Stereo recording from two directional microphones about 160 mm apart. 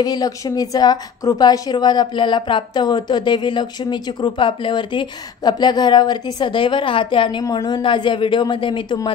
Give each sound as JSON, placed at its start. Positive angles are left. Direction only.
{"t": 0.0, "sound": "a woman's voice", "side_deg": 25}